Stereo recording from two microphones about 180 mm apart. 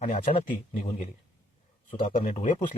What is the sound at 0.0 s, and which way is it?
Speech, 35° left (ahead or behind).